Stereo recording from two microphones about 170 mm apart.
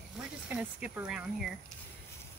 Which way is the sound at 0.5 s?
5° right (ahead or behind).